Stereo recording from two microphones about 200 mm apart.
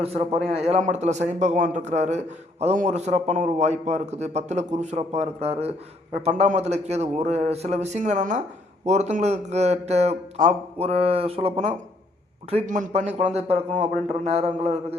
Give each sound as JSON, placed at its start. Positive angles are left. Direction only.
{"t": 0.0, "sound": "a man's voice", "side_deg": -30}